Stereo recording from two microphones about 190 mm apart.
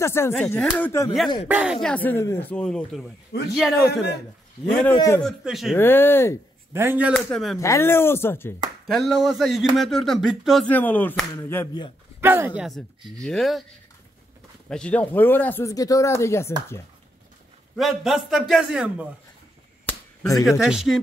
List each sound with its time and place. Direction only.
0.0 s speech: 15° left (ahead or behind)
1.5 s speech: 5° right (ahead or behind)
4.9 s speech: 15° left (ahead or behind)
5.2 s speech: centre (ahead or behind)
5.8 s speech: 10° left (ahead or behind)
6.7 s speech: 10° right (ahead or behind)
7.2 s speech: 5° left (ahead or behind)
7.5 s speech: 15° left (ahead or behind)
8.8 s speech: centre (ahead or behind)
12.2 s speech: 10° right (ahead or behind)
14.7 s speech: 5° left (ahead or behind)
17.7 s speech: centre (ahead or behind)
19.9 s a sound: 10° left (ahead or behind)
20.3 s speech: centre (ahead or behind)